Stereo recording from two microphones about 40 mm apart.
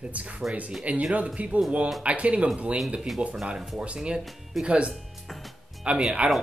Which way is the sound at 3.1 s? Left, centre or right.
Centre.